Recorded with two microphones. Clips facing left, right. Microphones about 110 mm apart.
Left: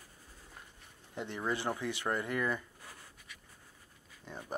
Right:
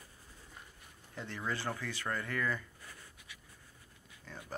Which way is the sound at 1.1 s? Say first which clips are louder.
Left 3 dB; 20° left (ahead or behind).